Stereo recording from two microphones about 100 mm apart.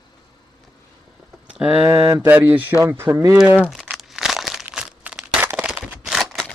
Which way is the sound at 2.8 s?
25° right (ahead or behind).